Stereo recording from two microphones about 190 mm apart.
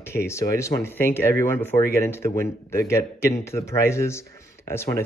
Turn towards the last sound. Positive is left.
turn(degrees=15)  # may be behind; listen again after turning